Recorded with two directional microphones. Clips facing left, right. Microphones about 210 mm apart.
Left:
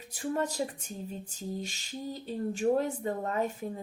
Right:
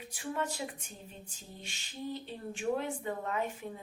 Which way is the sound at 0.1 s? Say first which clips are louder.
Left 5 dB; 40° left (ahead or behind).